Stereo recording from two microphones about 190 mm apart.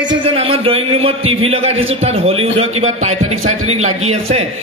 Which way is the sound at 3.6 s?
35° right (ahead or behind).